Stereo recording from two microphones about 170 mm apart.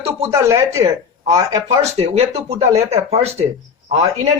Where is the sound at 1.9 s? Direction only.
40° right (ahead or behind).